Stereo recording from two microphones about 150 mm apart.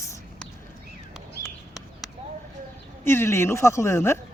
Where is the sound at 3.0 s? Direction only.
15° left (ahead or behind).